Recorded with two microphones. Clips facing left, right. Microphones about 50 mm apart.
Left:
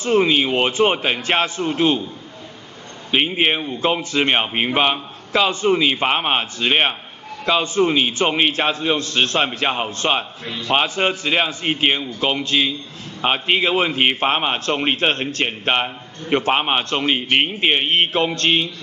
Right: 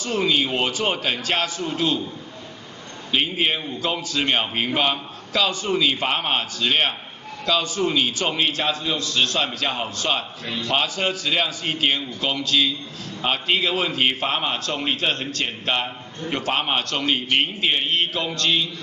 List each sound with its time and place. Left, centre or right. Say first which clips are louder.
0.0 s a man's voice: left 5 dB; left
3.1 s a man's voice: left 4 dB; left